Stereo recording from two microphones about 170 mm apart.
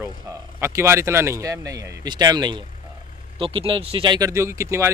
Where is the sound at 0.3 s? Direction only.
20° right (ahead or behind).